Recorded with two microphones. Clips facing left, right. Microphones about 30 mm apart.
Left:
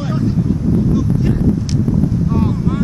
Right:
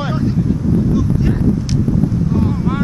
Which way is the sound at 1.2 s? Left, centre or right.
Centre.